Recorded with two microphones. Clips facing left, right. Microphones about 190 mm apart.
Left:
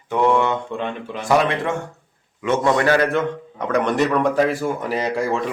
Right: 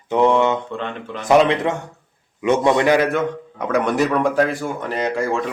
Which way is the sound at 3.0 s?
5° right (ahead or behind).